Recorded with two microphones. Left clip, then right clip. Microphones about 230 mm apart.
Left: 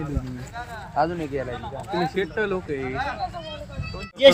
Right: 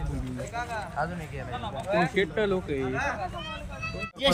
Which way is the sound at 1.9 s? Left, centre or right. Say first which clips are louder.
Even; right.